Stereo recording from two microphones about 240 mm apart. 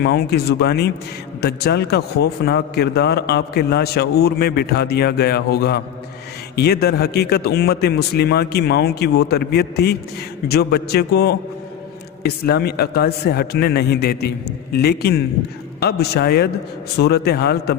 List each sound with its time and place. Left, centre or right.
0.0 s a man's voice: left